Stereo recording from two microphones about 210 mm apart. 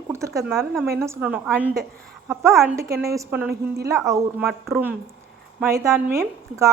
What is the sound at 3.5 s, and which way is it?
Speech, 50° right (ahead or behind).